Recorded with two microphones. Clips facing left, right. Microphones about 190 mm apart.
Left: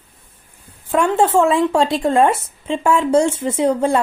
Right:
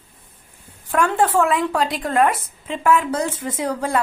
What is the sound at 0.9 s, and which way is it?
Speech, 25° left (ahead or behind).